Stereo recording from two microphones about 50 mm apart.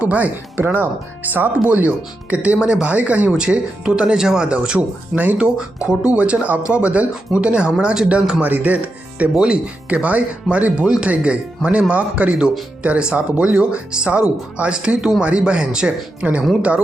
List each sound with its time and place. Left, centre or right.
0.0 s speech: right
0.5 s speech: right
5.1 s speech: right
5.5 s speech: centre
13.5 s speech: centre